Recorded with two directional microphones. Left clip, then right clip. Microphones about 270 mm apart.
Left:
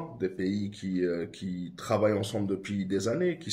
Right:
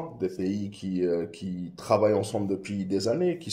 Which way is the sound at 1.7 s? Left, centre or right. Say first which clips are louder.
Right 5 dB; right.